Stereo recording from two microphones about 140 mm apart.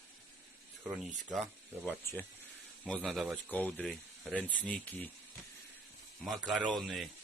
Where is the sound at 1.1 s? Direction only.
Centre (ahead or behind).